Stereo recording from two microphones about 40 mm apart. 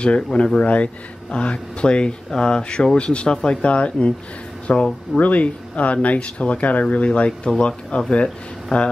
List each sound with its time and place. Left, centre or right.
0.0 s speech: left
7.2 s speech: left